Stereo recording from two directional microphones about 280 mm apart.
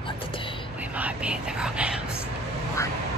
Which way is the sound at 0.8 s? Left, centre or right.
Centre.